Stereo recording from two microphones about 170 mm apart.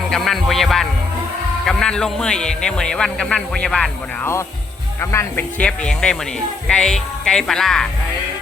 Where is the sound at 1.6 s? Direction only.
5° left (ahead or behind).